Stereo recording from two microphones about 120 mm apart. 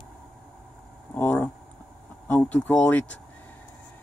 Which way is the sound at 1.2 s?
20° left (ahead or behind).